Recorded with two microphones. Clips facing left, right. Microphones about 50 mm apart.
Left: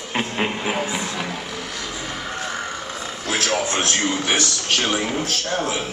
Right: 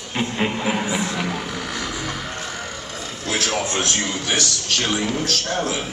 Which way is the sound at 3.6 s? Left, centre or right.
Left.